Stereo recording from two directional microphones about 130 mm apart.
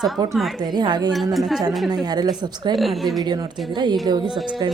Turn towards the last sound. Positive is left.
turn(degrees=-35)  # may be behind; listen again after turning